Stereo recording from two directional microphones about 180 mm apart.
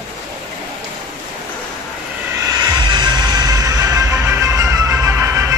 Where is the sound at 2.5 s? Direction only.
25° right (ahead or behind).